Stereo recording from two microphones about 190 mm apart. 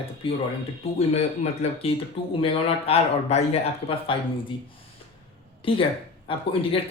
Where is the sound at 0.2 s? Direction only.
30° left (ahead or behind).